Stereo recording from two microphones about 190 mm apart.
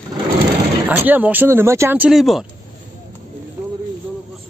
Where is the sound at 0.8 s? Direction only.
10° right (ahead or behind).